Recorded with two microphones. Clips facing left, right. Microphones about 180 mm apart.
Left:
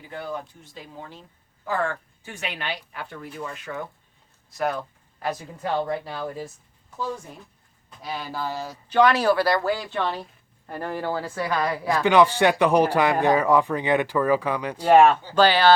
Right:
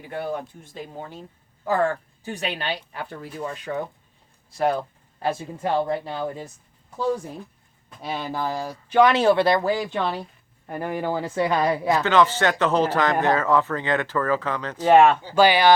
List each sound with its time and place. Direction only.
0.3 s speech: 50° right (ahead or behind)
1.6 s speech: 40° right (ahead or behind); by 6.4 s 20° right (ahead or behind)
8.0 s speech: 20° right (ahead or behind)
9.1 s speech: 25° right (ahead or behind)
12.0 s speech: 15° left (ahead or behind)
14.8 s speech: 5° right (ahead or behind)